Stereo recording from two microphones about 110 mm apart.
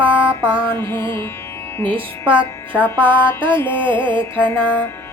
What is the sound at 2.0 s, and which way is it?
Music, 55° right (ahead or behind).